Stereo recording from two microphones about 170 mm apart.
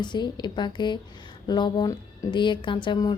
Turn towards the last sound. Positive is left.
turn(degrees=30)  # may be behind; listen again after turning